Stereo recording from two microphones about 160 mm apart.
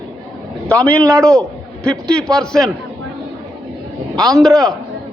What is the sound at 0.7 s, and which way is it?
Speech, 5° left (ahead or behind).